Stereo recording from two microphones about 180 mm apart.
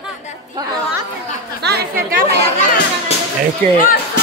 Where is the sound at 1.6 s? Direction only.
60° right (ahead or behind).